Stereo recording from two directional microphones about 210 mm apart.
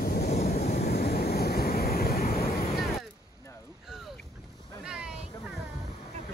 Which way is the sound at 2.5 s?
30° left (ahead or behind).